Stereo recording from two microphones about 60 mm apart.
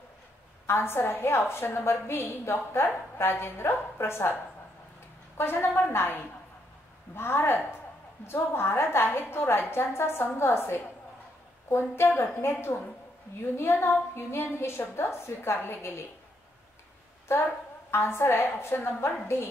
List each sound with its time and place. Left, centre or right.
0.7 s a woman's voice: left
5.4 s a woman's voice: left
17.9 s a woman's voice: left